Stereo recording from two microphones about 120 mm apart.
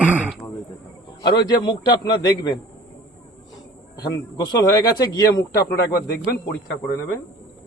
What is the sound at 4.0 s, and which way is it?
Speech, 35° left (ahead or behind).